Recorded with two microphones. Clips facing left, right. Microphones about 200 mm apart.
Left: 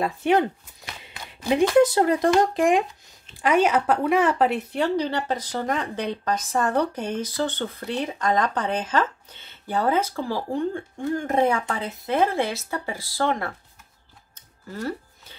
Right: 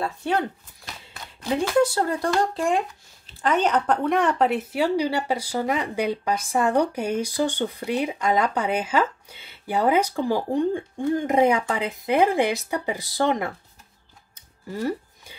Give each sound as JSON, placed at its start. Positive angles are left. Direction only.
{"t": 0.0, "sound": "speech", "side_deg": 15}
{"t": 1.0, "sound": "a sound", "side_deg": 15}
{"t": 1.8, "sound": "speech", "side_deg": 20}
{"t": 14.7, "sound": "music", "side_deg": -15}